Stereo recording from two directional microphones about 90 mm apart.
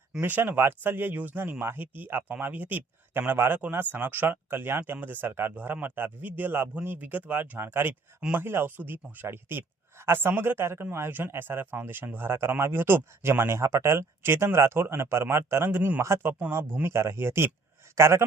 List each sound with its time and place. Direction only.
0.1 s speech: 20° right (ahead or behind)